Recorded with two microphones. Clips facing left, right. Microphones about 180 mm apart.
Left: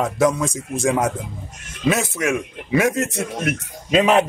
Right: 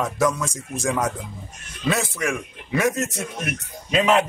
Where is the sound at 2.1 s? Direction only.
5° left (ahead or behind).